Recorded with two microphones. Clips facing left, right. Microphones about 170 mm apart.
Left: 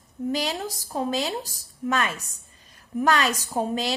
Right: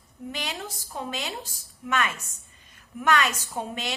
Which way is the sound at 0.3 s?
35° left (ahead or behind).